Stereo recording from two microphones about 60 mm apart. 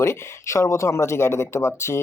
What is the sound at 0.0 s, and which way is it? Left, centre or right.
Speech, left.